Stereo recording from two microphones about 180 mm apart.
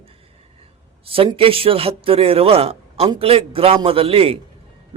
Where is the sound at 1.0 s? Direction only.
30° right (ahead or behind).